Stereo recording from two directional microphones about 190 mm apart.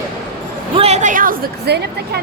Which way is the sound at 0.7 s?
35° right (ahead or behind).